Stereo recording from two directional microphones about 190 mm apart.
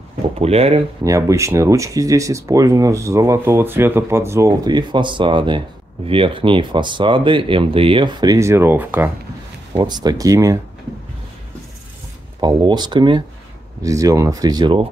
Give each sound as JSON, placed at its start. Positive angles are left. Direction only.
{"t": 0.4, "sound": "speech", "side_deg": -30}
{"t": 1.0, "sound": "speech", "side_deg": -15}
{"t": 9.8, "sound": "speech", "side_deg": -20}
{"t": 12.4, "sound": "speech", "side_deg": -25}